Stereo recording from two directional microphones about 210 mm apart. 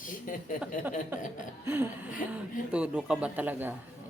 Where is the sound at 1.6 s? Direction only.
10° right (ahead or behind).